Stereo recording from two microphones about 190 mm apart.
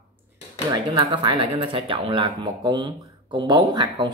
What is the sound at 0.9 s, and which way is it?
Speech, 25° right (ahead or behind).